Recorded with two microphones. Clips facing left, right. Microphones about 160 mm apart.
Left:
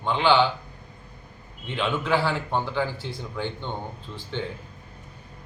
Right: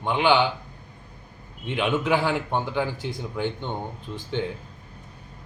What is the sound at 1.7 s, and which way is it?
A man's voice, 15° right (ahead or behind).